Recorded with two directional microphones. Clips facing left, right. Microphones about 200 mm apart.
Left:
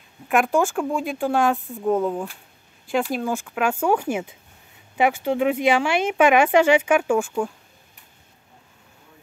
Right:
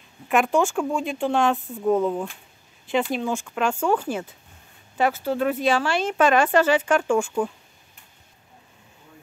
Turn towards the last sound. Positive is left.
turn(degrees=0)  # may be behind; listen again after turning